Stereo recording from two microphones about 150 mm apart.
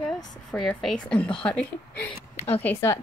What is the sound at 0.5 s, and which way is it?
A woman's voice, centre (ahead or behind).